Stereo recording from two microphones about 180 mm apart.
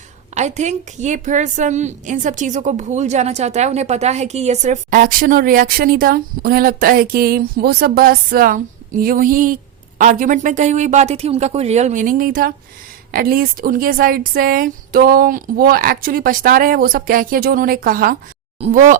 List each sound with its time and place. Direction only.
0.3 s a woman's voice: 40° right (ahead or behind)